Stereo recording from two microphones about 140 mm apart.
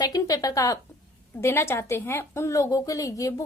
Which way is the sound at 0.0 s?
25° left (ahead or behind).